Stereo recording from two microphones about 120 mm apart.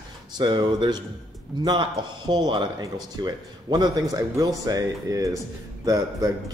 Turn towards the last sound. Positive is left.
turn(degrees=-30)  # may be behind; listen again after turning